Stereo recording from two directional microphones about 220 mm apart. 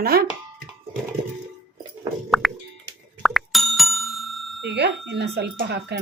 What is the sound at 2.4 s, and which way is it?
Plop, centre (ahead or behind).